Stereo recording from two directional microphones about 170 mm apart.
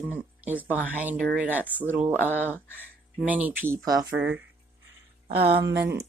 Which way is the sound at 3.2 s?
10° right (ahead or behind).